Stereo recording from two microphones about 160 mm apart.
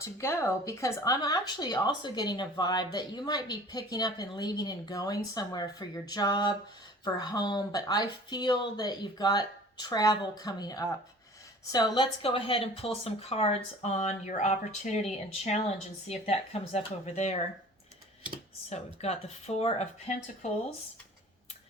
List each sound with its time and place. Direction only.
0.0 s speech: 15° left (ahead or behind); by 17.4 s 45° left (ahead or behind)
19.0 s speech: 40° left (ahead or behind)